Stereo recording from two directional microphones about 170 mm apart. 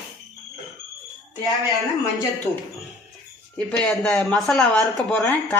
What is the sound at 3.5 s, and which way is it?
Speech, 5° left (ahead or behind).